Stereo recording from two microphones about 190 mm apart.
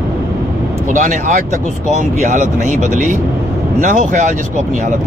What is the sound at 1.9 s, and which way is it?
Speech, 40° right (ahead or behind).